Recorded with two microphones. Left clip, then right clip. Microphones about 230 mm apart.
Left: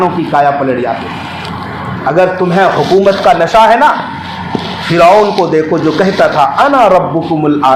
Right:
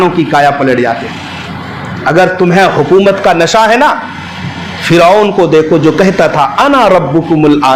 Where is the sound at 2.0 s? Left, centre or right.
Right.